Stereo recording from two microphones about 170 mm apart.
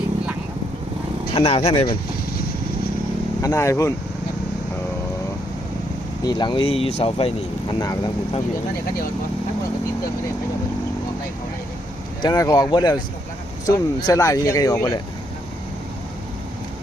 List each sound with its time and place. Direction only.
1.3 s speech: 35° left (ahead or behind)
3.4 s speech: 20° left (ahead or behind)
6.2 s speech: 25° left (ahead or behind)
7.8 s speech: 20° left (ahead or behind)
12.2 s speech: 20° left (ahead or behind)